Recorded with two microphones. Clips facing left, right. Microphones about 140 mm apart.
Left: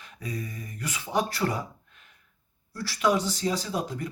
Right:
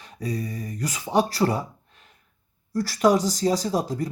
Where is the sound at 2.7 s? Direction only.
40° right (ahead or behind).